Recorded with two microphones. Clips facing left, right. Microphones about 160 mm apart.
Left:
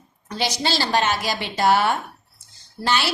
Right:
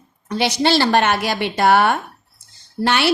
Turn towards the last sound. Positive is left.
turn(degrees=-60)  # may be behind; listen again after turning